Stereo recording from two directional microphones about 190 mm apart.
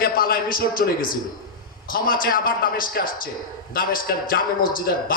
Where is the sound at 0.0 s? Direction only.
50° left (ahead or behind).